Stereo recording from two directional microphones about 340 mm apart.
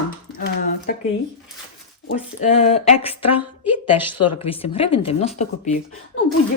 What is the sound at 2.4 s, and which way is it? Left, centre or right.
Speech, centre.